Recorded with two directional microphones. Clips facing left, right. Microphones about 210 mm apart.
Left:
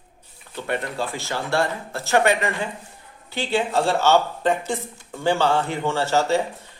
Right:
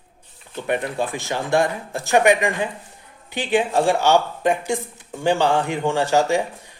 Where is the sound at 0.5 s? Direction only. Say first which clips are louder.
Right 3 dB; 15° right (ahead or behind).